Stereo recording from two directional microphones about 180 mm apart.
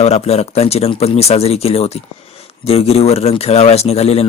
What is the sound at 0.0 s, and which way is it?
A man's voice, 35° left (ahead or behind).